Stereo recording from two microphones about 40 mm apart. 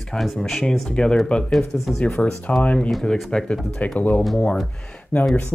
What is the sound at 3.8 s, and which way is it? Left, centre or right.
Speech, left.